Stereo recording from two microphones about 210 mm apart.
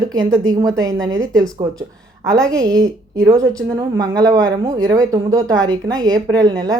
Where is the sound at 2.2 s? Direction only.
5° left (ahead or behind).